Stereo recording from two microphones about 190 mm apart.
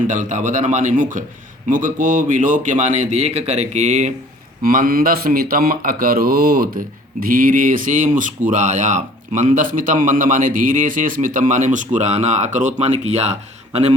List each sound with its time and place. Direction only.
0.1 s a man's voice: 40° right (ahead or behind)
4.6 s mantra: 50° right (ahead or behind)
11.9 s a man's voice: 35° right (ahead or behind)